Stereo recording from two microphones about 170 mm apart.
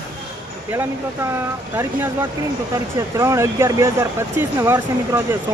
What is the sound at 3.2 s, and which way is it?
Speech, 15° right (ahead or behind).